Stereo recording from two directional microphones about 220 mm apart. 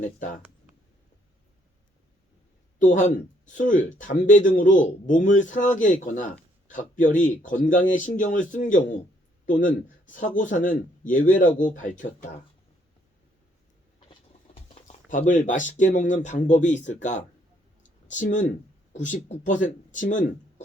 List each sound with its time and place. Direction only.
2.7 s speech: 35° left (ahead or behind)
14.1 s a sound: 25° left (ahead or behind)
15.3 s speech: 35° left (ahead or behind)